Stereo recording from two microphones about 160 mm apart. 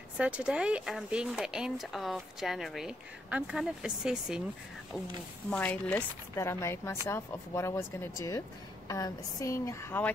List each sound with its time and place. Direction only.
0.2 s speech: 5° right (ahead or behind)
5.5 s speech: 10° left (ahead or behind)